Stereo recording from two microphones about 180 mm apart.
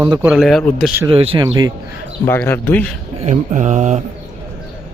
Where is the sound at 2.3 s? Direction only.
10° left (ahead or behind).